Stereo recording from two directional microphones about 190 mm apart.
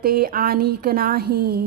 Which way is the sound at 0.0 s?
50° right (ahead or behind).